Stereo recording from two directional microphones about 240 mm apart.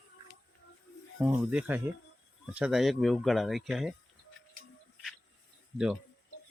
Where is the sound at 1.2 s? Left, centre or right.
Centre.